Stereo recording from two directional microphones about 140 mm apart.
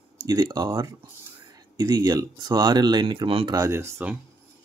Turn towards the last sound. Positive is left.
turn(degrees=-15)  # may be behind; listen again after turning